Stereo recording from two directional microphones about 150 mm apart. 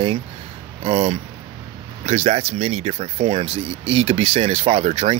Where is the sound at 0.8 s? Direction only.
45° right (ahead or behind).